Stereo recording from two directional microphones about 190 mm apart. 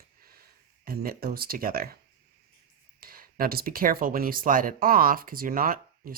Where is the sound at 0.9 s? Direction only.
50° right (ahead or behind).